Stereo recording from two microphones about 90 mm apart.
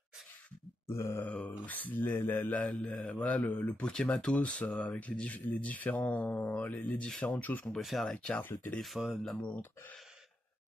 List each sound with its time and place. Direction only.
0.8 s grunt: 30° left (ahead or behind)
1.2 s speech: 20° left (ahead or behind)
7.7 s speech: centre (ahead or behind)
8.4 s speech: 20° left (ahead or behind)
8.7 s speech: centre (ahead or behind)